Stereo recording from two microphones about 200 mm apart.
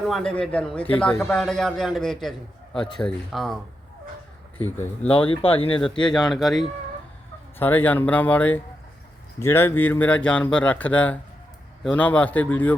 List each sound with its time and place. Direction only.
0.0 s speech: centre (ahead or behind)
5.0 s speech: 30° left (ahead or behind)
6.1 s speech: centre (ahead or behind)